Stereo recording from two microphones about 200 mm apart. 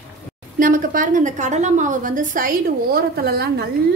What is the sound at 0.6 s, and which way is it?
A woman's voice, 40° right (ahead or behind).